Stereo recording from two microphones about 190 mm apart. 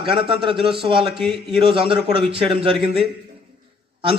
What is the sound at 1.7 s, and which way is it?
Speech, 30° right (ahead or behind).